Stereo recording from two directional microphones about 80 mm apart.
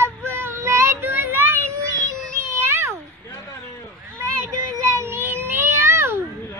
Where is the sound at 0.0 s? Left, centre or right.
Right.